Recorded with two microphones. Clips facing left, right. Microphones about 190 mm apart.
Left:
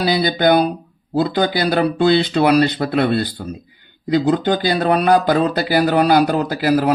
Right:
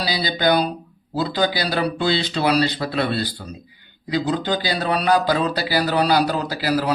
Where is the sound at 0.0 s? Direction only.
50° left (ahead or behind).